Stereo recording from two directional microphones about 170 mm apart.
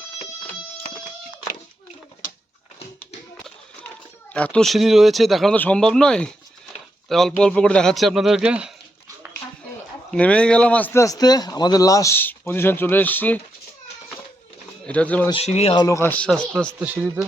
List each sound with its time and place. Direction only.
3.8 s a man's voice: 10° left (ahead or behind)
10.1 s speech: 5° left (ahead or behind)
14.8 s speech: 10° left (ahead or behind)
15.3 s speech: 40° left (ahead or behind)
15.7 s speech: 20° left (ahead or behind)
16.8 s speech: 10° right (ahead or behind)